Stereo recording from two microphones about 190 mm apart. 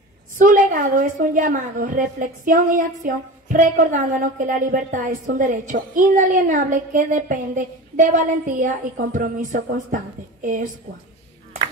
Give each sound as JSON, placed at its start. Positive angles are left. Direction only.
{"t": 0.4, "sound": "a woman's voice", "side_deg": -45}